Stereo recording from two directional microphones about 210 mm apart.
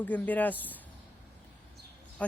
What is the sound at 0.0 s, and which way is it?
Speech, 10° left (ahead or behind).